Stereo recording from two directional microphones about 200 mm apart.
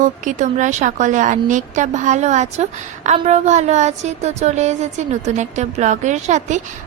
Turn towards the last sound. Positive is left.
turn(degrees=-35)  # may be behind; listen again after turning